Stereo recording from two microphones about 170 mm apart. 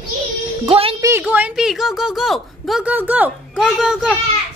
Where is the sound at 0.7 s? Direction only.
35° right (ahead or behind).